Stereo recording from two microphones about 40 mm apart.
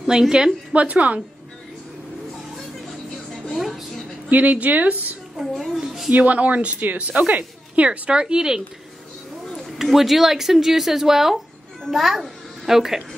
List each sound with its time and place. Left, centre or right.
0.0 s a woman's voice: centre
0.7 s speech: right
3.4 s a sound: centre
4.3 s speech: right
5.4 s speech: centre
5.8 s a sound: centre
6.1 s a woman's voice: right; by 8.6 s centre
9.5 s a sound: centre
9.8 s a child's voice: centre